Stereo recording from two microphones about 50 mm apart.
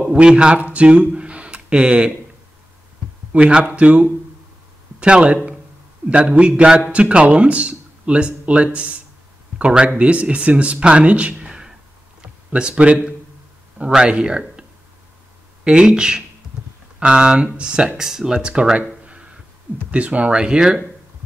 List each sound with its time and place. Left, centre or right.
0.1 s speech: right
3.3 s speech: right
18.4 s speech: centre
19.9 s speech: right